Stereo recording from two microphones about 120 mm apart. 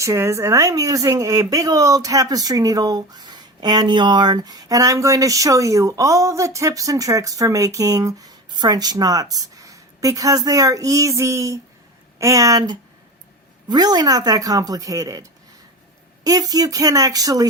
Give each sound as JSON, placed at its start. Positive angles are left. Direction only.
{"t": 0.0, "sound": "a woman's voice", "side_deg": -25}